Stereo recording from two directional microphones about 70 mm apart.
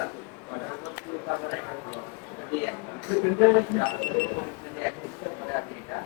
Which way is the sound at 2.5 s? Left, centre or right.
Left.